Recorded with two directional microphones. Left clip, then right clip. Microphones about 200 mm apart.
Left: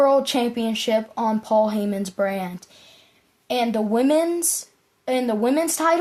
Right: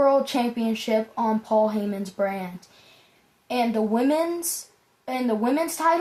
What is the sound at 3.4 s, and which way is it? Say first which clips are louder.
A woman's voice: left 2 dB; 55° left (ahead or behind).